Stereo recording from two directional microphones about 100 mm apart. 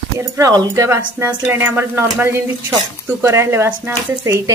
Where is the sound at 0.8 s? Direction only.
25° right (ahead or behind).